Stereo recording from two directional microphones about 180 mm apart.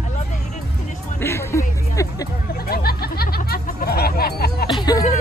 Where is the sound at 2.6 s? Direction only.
55° left (ahead or behind).